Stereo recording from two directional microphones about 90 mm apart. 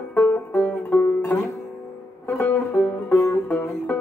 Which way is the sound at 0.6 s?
20° left (ahead or behind).